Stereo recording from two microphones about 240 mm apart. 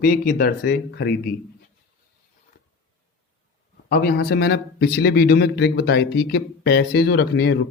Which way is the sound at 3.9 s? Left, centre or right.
Left.